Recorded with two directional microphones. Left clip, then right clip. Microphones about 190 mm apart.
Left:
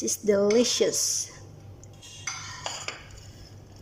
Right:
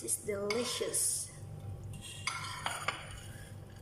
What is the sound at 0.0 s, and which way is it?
Speech, 45° left (ahead or behind).